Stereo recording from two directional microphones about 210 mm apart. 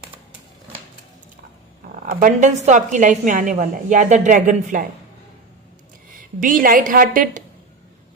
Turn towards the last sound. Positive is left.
turn(degrees=-40)  # may be behind; listen again after turning